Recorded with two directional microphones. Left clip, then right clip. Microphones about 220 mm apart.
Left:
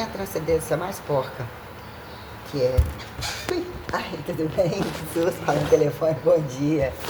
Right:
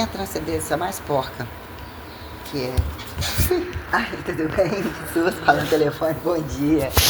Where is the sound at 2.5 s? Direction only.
30° right (ahead or behind).